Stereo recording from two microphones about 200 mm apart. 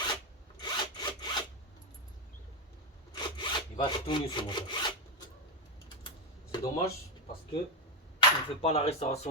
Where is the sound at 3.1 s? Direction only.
25° left (ahead or behind).